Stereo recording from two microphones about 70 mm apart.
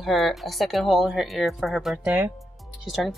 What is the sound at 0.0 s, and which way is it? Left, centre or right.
Speech, centre.